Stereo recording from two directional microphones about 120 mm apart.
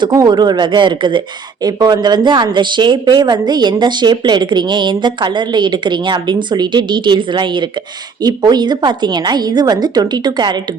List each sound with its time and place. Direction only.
0.0 s a woman's voice: 35° right (ahead or behind)